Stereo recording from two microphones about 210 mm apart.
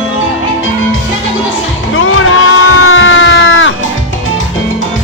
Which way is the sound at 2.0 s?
75° left (ahead or behind).